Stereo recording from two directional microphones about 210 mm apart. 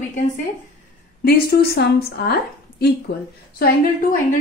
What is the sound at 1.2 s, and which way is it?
A woman's voice, 45° left (ahead or behind).